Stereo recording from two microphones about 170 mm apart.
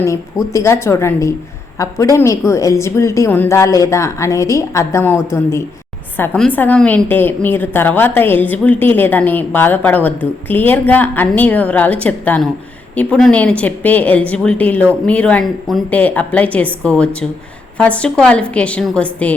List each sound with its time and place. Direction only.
0.5 s a woman's voice: 15° left (ahead or behind)